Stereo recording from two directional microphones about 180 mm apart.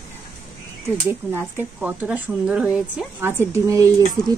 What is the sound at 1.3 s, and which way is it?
A woman's voice, 10° right (ahead or behind).